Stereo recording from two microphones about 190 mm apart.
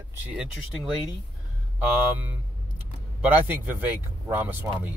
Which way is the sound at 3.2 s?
10° right (ahead or behind).